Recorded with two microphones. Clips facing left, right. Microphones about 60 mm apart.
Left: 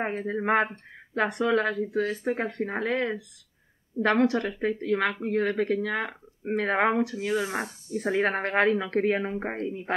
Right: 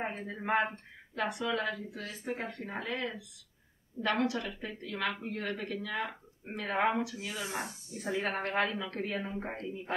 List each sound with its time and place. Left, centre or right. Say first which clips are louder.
0.2 s speech: left 6 dB; left
4.0 s a woman's voice: left 8 dB; left
4.3 s speech: left 10 dB; left